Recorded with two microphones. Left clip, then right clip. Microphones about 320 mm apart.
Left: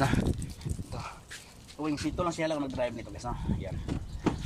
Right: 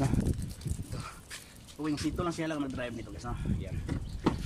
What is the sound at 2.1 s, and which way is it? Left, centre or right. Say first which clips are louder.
Speech: left 3 dB; centre.